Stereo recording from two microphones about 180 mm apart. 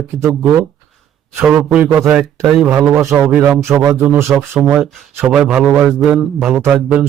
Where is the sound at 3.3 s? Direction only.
5° right (ahead or behind).